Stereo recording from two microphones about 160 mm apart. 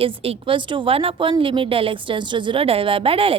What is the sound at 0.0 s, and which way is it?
A woman's voice, 35° right (ahead or behind).